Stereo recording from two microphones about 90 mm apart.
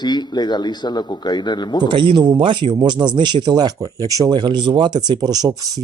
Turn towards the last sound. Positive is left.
turn(degrees=-45)  # may be behind; listen again after turning